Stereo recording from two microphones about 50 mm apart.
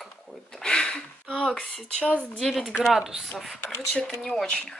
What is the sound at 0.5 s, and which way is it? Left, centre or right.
Speech, centre.